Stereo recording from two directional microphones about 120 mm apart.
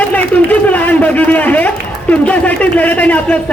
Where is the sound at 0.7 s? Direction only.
15° left (ahead or behind).